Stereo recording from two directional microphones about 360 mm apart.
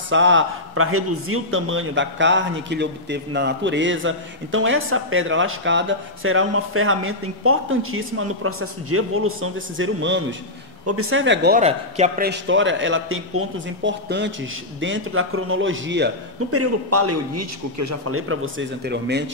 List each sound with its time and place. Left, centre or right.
0.1 s a man's voice: right